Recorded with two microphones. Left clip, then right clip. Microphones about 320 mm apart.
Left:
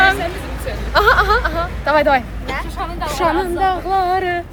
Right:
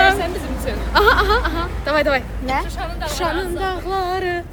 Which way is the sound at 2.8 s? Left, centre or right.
Centre.